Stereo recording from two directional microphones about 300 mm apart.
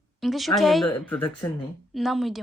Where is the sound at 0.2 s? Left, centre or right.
Centre.